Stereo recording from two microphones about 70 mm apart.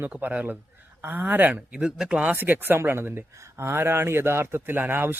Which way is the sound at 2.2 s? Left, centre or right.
Right.